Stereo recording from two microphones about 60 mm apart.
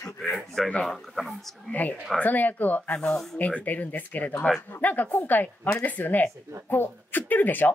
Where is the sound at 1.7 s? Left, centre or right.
Left.